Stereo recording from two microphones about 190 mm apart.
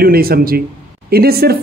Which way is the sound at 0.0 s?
50° right (ahead or behind).